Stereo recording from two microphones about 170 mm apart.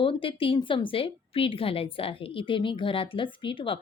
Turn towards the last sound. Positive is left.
turn(degrees=30)  # may be behind; listen again after turning